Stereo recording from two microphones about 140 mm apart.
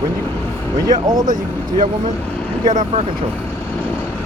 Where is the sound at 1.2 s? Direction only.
70° right (ahead or behind).